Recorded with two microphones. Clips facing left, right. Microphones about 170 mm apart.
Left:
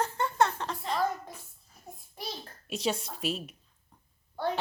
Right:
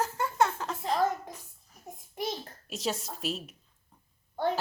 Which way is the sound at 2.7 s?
Centre (ahead or behind).